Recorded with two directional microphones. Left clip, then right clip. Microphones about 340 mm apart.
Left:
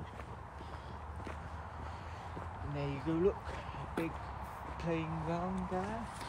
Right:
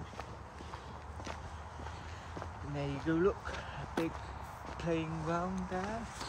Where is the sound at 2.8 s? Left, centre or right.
Right.